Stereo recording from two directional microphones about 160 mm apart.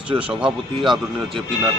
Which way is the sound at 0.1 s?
35° right (ahead or behind).